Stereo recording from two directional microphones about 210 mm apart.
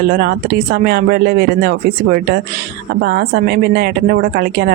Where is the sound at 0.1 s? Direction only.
45° right (ahead or behind).